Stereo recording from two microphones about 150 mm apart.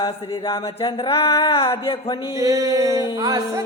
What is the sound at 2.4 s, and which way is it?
Speech, 20° right (ahead or behind).